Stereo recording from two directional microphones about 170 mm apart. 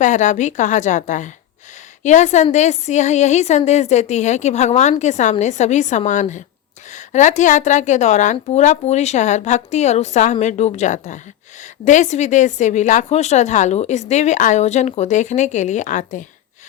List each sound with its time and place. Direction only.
0.0 s a woman's voice: 45° left (ahead or behind)